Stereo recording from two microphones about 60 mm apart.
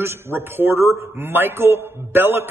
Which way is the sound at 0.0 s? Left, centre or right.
Right.